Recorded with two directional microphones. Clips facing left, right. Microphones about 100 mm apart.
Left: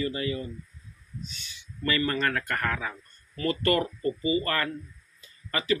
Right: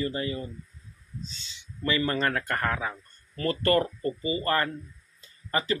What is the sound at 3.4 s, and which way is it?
Speech, 35° right (ahead or behind).